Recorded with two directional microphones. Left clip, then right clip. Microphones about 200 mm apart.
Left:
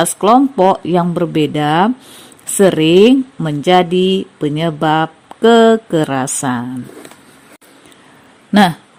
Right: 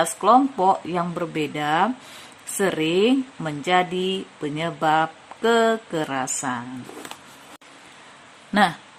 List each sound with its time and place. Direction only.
0.0 s speech: 35° left (ahead or behind)
8.5 s speech: 25° left (ahead or behind)